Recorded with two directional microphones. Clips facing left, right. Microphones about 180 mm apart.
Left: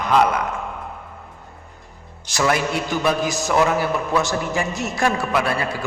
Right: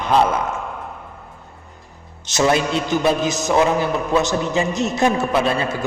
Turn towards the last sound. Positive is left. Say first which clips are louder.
# right 3 dB
turn(degrees=-25)  # may be behind; listen again after turning